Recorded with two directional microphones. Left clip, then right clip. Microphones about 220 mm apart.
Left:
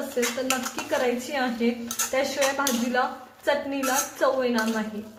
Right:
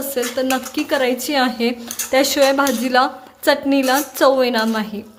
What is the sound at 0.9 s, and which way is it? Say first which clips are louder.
Speech: right 7 dB; 45° right (ahead or behind).